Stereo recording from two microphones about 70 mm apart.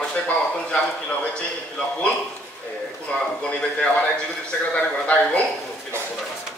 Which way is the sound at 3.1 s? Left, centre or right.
Centre.